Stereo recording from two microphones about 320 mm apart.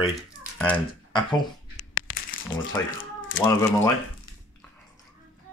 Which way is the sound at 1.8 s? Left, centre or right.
Left.